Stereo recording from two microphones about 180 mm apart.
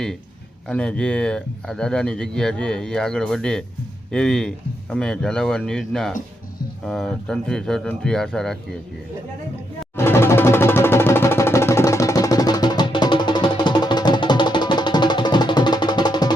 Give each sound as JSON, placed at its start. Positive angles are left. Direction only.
{"t": 0.7, "sound": "speech", "side_deg": 5}
{"t": 9.9, "sound": "music", "side_deg": 15}